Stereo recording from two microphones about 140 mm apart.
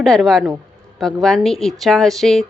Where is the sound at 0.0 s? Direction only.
Centre (ahead or behind).